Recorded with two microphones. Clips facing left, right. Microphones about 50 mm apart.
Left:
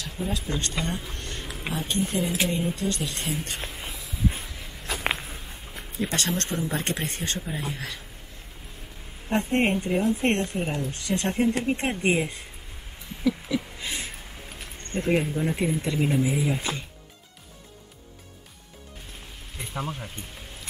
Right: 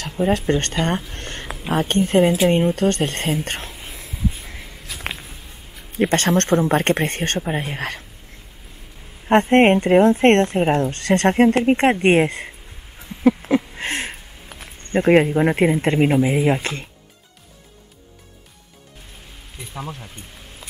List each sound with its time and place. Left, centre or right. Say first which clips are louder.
0.0 s speech: right 11 dB; right
4.9 s a sound: left 2 dB; left
5.9 s speech: right 10 dB; right
9.3 s speech: right 10 dB; right
13.5 s a sound: right 9 dB; right
15.0 s speech: right 10 dB; right
19.6 s speech: even; centre